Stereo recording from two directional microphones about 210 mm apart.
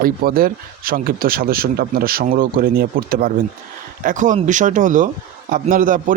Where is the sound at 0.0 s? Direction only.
45° right (ahead or behind).